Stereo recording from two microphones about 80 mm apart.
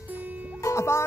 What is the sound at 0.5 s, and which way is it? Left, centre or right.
Music, left.